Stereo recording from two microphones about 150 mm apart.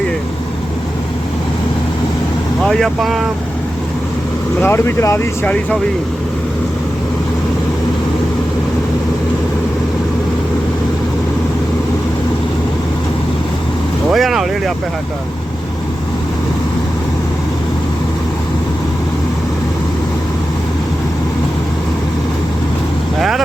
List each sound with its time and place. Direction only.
2.6 s speech: centre (ahead or behind)
4.6 s speech: 15° left (ahead or behind)
14.1 s speech: centre (ahead or behind)